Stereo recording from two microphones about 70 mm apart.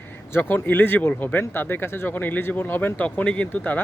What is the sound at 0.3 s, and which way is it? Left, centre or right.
Speech, left.